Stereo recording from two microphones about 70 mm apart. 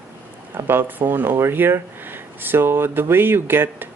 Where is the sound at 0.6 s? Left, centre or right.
Right.